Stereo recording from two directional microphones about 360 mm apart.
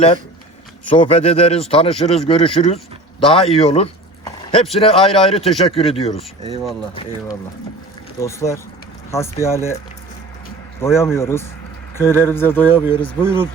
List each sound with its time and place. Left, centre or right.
0.9 s speech: centre
8.2 s speech: centre
10.8 s speech: centre